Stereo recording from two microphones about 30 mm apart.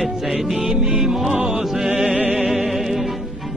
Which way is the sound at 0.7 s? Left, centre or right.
Right.